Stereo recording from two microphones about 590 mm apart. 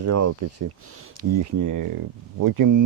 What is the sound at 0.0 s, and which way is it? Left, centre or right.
Speech, right.